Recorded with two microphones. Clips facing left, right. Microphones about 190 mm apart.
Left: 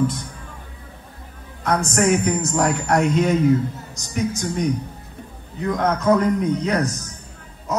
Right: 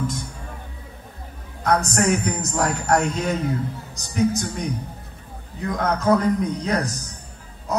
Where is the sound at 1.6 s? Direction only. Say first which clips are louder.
Left 1 dB; 35° right (ahead or behind).